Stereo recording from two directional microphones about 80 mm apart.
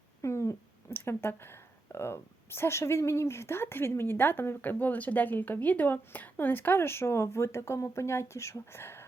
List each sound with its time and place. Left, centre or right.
0.2 s speech: left